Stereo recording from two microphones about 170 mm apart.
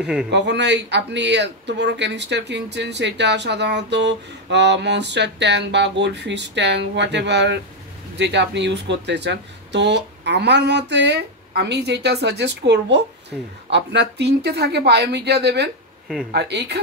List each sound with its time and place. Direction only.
0.0 s a man's voice: 5° right (ahead or behind)
0.3 s speech: 90° right